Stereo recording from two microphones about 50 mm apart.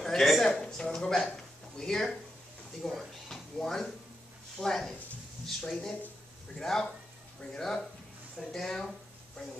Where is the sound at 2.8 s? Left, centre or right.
Centre.